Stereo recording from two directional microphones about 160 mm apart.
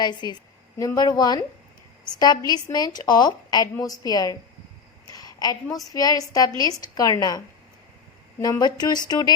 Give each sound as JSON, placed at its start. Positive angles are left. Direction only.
{"t": 0.0, "sound": "a woman's voice", "side_deg": 25}
{"t": 5.1, "sound": "a sound", "side_deg": 25}
{"t": 5.7, "sound": "a woman's voice", "side_deg": 25}